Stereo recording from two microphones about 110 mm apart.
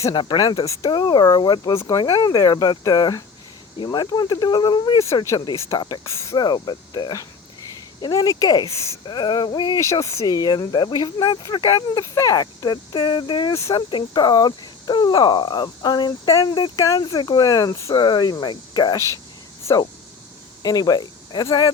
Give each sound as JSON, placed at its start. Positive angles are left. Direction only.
{"t": 0.1, "sound": "speech", "side_deg": 45}
{"t": 0.9, "sound": "speech", "side_deg": 45}
{"t": 1.7, "sound": "speech", "side_deg": 25}
{"t": 6.1, "sound": "speech", "side_deg": 25}
{"t": 6.3, "sound": "speech", "side_deg": 40}
{"t": 9.8, "sound": "speech", "side_deg": 25}
{"t": 13.5, "sound": "speech", "side_deg": 25}
{"t": 13.9, "sound": "speech", "side_deg": 40}
{"t": 16.6, "sound": "speech", "side_deg": 45}
{"t": 16.8, "sound": "speech", "side_deg": 35}
{"t": 20.6, "sound": "speech", "side_deg": 35}